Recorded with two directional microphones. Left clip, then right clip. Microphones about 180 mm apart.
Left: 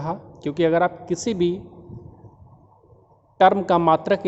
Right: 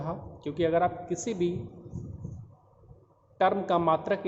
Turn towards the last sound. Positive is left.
turn(degrees=65)  # may be behind; listen again after turning